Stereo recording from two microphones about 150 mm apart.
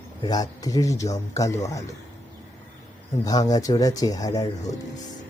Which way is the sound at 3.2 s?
25° left (ahead or behind).